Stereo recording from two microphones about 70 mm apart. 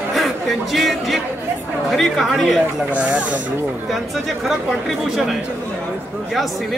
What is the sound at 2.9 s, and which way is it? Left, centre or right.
Speech, centre.